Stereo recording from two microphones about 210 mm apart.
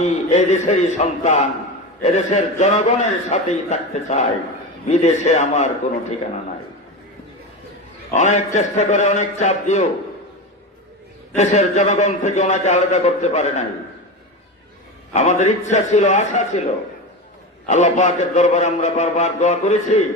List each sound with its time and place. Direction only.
0.0 s a man's voice: 35° left (ahead or behind)
8.1 s a man's voice: 35° left (ahead or behind)
11.3 s a man's voice: 35° left (ahead or behind)
15.1 s a man's voice: 35° left (ahead or behind)
17.7 s a man's voice: 35° left (ahead or behind)